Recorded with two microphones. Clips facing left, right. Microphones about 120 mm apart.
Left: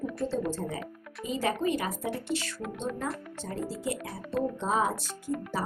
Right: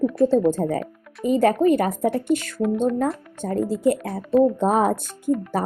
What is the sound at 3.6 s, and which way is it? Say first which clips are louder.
Speech: right 14 dB; 50° right (ahead or behind).